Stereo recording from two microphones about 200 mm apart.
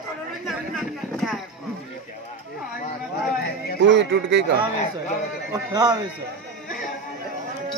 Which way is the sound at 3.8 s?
65° right (ahead or behind).